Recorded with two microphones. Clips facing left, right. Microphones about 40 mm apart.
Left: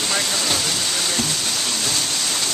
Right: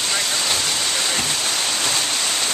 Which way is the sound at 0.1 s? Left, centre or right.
Centre.